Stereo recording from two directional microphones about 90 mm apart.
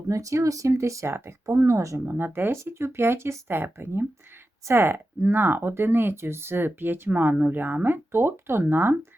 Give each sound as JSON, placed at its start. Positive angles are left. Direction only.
{"t": 0.1, "sound": "speech", "side_deg": -35}